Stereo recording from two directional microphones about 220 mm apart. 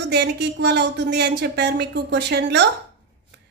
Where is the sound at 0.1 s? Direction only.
50° right (ahead or behind).